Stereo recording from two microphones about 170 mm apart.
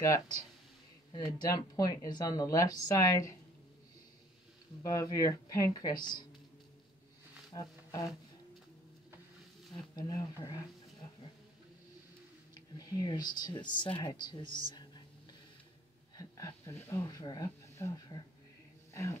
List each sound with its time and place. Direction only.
1.1 s speech: 25° left (ahead or behind)
4.8 s speech: 20° left (ahead or behind)
7.5 s speech: 20° left (ahead or behind)
9.7 s speech: 20° left (ahead or behind)
12.7 s speech: 25° left (ahead or behind)
14.7 s a sound: 25° left (ahead or behind)
16.2 s speech: 20° left (ahead or behind)